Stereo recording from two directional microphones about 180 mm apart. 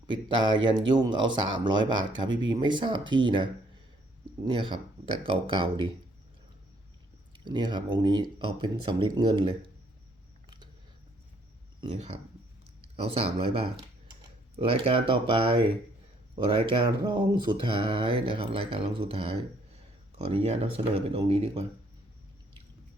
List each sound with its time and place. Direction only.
0.1 s speech: 25° right (ahead or behind)
7.3 s speech: 25° right (ahead or behind)
11.8 s speech: 30° right (ahead or behind)